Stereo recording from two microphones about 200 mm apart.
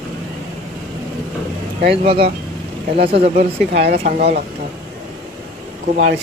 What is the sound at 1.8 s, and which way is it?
Speech, 25° right (ahead or behind).